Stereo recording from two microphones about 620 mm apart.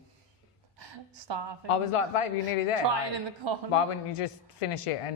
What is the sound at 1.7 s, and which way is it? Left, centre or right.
Speech, left.